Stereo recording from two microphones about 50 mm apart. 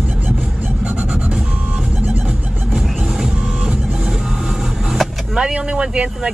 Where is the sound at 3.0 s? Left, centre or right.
Centre.